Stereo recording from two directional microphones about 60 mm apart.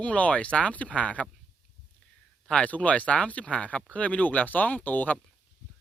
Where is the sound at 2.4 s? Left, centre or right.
Centre.